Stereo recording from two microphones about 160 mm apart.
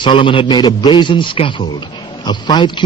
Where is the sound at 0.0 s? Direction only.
30° left (ahead or behind).